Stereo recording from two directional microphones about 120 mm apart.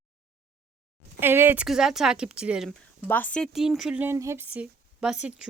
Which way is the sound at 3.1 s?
15° left (ahead or behind).